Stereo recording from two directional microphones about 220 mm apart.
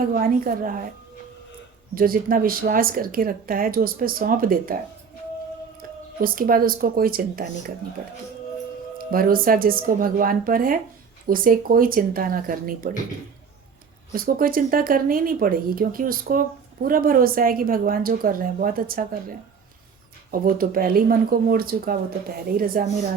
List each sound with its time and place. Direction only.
0.1 s speech: 40° right (ahead or behind)
2.0 s speech: 40° right (ahead or behind)
6.2 s speech: 40° right (ahead or behind)
9.0 s speech: 40° right (ahead or behind)
14.1 s speech: 40° right (ahead or behind)
20.3 s speech: 40° right (ahead or behind)